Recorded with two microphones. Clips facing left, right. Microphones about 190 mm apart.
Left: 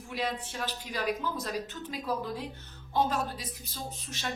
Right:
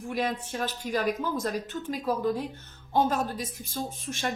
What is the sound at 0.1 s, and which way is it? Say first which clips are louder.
A woman's voice: right 4 dB; 45° right (ahead or behind).